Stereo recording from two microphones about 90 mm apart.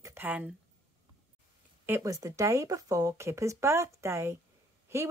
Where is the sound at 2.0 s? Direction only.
40° right (ahead or behind).